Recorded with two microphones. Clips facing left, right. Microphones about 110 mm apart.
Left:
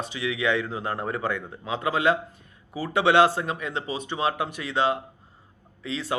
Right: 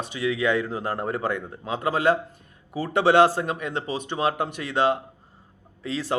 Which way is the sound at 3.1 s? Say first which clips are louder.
Right 2 dB; 40° right (ahead or behind).